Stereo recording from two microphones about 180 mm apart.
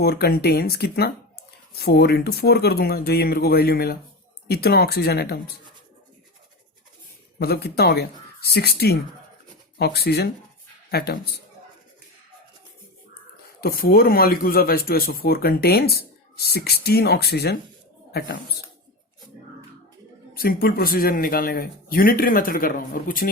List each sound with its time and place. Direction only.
0.0 s speech: 60° left (ahead or behind)
7.3 s speech: 60° left (ahead or behind)
13.6 s speech: 55° left (ahead or behind)
18.1 s speech: 50° left (ahead or behind)
20.4 s speech: 55° left (ahead or behind)